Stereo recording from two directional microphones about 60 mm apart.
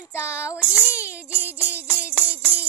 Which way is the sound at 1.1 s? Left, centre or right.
Right.